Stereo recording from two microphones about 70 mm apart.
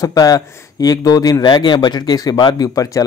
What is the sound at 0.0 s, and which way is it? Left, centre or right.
Speech, left.